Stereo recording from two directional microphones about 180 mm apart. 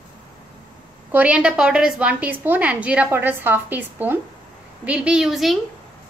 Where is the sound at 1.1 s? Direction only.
10° right (ahead or behind).